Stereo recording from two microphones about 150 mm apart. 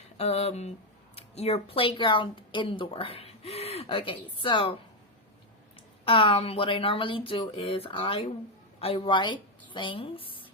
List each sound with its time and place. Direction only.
0.2 s speech: 40° left (ahead or behind)
6.1 s speech: 40° left (ahead or behind)